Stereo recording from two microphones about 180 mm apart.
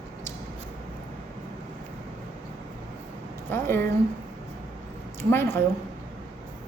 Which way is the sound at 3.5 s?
10° left (ahead or behind).